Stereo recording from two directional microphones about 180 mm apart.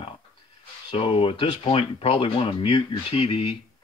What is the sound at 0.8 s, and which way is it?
Speech, 30° left (ahead or behind).